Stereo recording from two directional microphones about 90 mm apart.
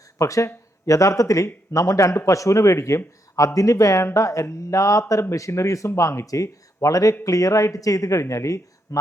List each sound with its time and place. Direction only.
0.2 s speech: 35° left (ahead or behind)